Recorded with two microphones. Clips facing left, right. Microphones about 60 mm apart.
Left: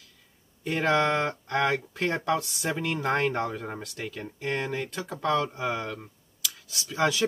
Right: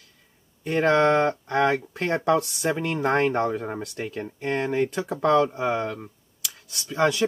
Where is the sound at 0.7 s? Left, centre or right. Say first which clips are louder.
Right 5 dB; centre.